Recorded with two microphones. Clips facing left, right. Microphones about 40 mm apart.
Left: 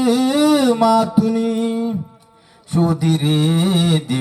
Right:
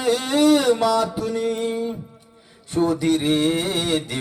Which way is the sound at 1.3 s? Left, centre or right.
Centre.